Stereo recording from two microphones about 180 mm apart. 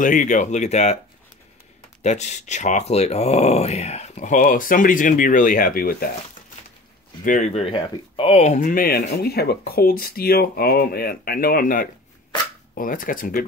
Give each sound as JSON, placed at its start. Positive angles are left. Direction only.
{"t": 0.0, "sound": "speech", "side_deg": 45}
{"t": 2.0, "sound": "speech", "side_deg": 40}
{"t": 7.2, "sound": "speech", "side_deg": 40}